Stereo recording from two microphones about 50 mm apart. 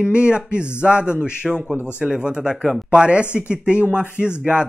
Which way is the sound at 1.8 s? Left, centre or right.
Centre.